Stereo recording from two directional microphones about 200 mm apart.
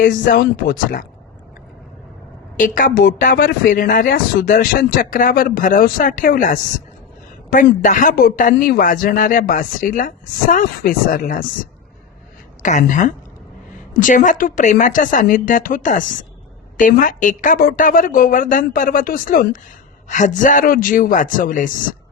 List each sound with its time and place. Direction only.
0.3 s speech: 45° left (ahead or behind)
2.6 s a woman's voice: 40° left (ahead or behind)